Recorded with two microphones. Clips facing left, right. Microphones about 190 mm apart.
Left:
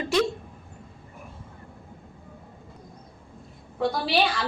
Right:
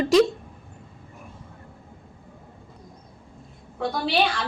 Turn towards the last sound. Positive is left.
turn(degrees=0)  # may be behind; listen again after turning